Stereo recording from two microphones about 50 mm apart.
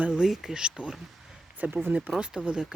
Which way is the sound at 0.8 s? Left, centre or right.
Right.